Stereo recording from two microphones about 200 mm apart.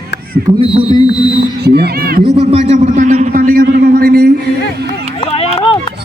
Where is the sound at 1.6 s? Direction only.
55° right (ahead or behind).